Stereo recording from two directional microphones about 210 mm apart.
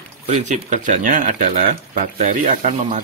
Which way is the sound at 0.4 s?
35° right (ahead or behind).